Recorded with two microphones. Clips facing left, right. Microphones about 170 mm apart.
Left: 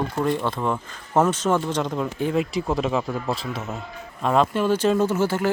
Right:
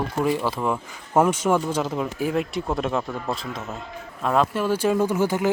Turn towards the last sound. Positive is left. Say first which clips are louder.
# even
turn(degrees=-15)  # may be behind; listen again after turning